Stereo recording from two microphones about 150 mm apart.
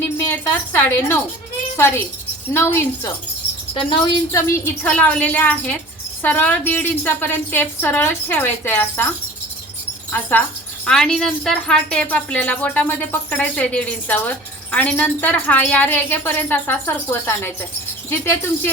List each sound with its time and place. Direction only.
0.2 s a woman's voice: 15° left (ahead or behind)
4.3 s a woman's voice: 20° left (ahead or behind)
10.1 s a woman's voice: 15° left (ahead or behind)